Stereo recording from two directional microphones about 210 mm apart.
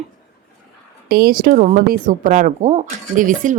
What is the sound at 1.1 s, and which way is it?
Speech, 45° right (ahead or behind).